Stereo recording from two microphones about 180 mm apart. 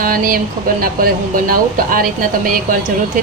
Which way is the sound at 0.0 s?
50° right (ahead or behind).